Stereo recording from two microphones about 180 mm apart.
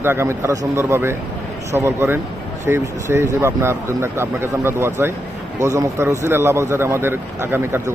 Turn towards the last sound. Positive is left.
turn(degrees=-10)  # may be behind; listen again after turning